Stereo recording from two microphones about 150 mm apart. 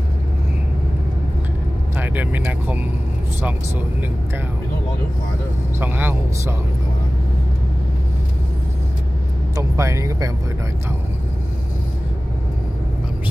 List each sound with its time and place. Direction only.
2.0 s speech: 10° right (ahead or behind)
5.8 s a man's voice: 15° right (ahead or behind)
9.6 s speech: 20° right (ahead or behind)